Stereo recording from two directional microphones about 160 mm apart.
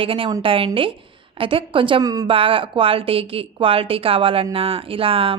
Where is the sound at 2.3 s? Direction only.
35° right (ahead or behind).